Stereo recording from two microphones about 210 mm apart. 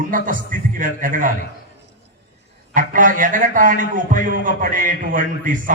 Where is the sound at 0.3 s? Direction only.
40° right (ahead or behind).